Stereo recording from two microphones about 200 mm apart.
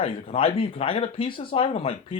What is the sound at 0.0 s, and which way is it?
A man's voice, 30° left (ahead or behind).